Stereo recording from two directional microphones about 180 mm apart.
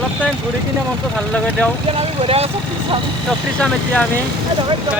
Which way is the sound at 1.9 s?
35° right (ahead or behind).